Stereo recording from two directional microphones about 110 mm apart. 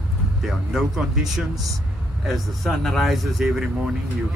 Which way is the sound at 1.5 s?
35° right (ahead or behind).